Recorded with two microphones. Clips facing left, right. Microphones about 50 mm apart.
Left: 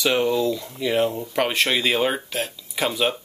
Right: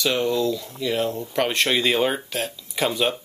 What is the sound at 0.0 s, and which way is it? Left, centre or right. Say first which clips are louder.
Speech: left 1 dB; centre.